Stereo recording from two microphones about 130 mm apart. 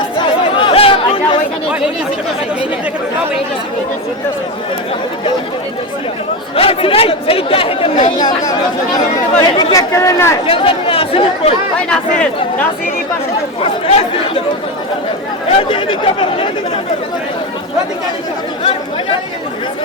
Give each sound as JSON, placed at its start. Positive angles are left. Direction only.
{"t": 0.2, "sound": "chatter", "side_deg": 40}
{"t": 6.6, "sound": "speech", "side_deg": 45}
{"t": 8.2, "sound": "speech", "side_deg": 30}
{"t": 10.4, "sound": "speech", "side_deg": 45}
{"t": 11.9, "sound": "speech", "side_deg": 10}
{"t": 13.6, "sound": "speech", "side_deg": 45}
{"t": 15.5, "sound": "speech", "side_deg": 45}